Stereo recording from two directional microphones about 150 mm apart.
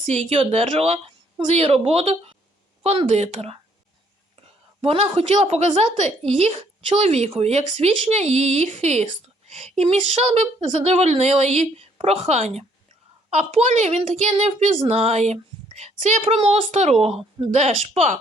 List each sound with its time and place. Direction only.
0.0 s a woman's voice: 45° right (ahead or behind)
4.8 s a woman's voice: 40° right (ahead or behind)